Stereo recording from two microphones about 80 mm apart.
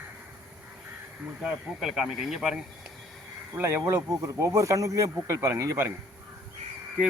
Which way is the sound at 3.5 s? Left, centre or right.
Right.